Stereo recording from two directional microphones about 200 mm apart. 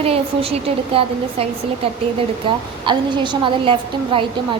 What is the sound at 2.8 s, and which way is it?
A woman's voice, 20° right (ahead or behind).